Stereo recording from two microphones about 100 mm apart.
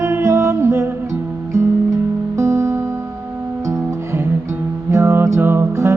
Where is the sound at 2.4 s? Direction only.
30° right (ahead or behind).